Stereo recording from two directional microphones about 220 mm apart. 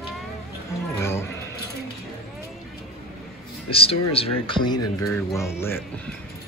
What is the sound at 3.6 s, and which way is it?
Speech, 25° left (ahead or behind).